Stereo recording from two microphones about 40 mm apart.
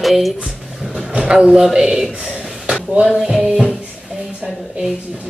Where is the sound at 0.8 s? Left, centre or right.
Centre.